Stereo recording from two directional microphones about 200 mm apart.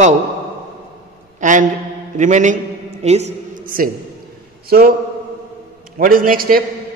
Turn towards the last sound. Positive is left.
turn(degrees=-45)  # may be behind; listen again after turning